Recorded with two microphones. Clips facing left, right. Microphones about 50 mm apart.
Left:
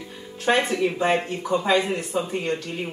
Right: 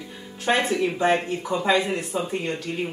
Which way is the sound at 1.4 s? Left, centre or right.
Centre.